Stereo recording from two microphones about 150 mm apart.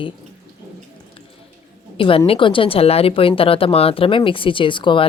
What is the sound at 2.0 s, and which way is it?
Speech, 40° left (ahead or behind).